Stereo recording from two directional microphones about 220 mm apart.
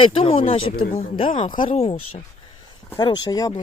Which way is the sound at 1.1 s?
25° left (ahead or behind).